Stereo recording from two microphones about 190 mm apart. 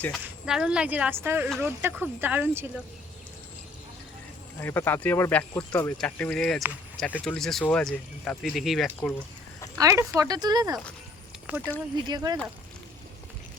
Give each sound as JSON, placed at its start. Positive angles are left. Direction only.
{"t": 0.0, "sound": "speech", "side_deg": 0}
{"t": 4.6, "sound": "speech", "side_deg": 10}
{"t": 9.7, "sound": "speech", "side_deg": -15}
{"t": 11.4, "sound": "speech", "side_deg": -10}
{"t": 12.0, "sound": "speech", "side_deg": -20}